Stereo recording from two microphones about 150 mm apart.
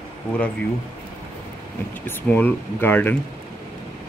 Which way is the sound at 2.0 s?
10° left (ahead or behind).